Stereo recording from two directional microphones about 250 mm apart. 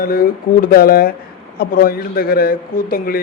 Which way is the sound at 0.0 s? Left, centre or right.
Left.